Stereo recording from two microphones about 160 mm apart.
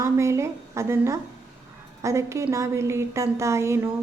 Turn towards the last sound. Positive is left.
turn(degrees=-15)  # may be behind; listen again after turning